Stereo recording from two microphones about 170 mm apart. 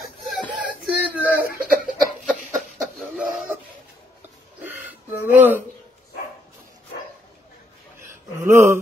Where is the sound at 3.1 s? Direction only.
10° right (ahead or behind).